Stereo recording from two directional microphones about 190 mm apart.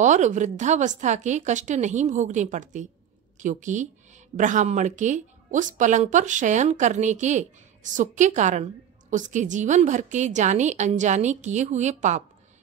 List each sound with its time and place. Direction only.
0.0 s speech: 40° right (ahead or behind)